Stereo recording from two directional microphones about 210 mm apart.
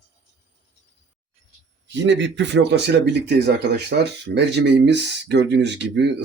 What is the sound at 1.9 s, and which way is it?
Speech, 60° right (ahead or behind).